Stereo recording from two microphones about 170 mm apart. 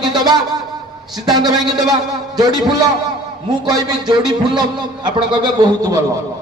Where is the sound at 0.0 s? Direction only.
25° right (ahead or behind).